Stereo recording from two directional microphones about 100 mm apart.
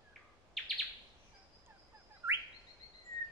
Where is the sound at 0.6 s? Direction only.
Centre (ahead or behind).